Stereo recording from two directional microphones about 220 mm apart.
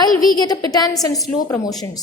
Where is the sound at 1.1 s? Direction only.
Centre (ahead or behind).